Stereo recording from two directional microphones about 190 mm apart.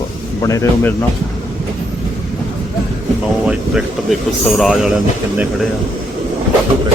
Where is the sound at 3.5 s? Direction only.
5° right (ahead or behind).